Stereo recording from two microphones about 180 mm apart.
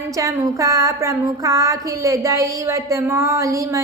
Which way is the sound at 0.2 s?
20° right (ahead or behind).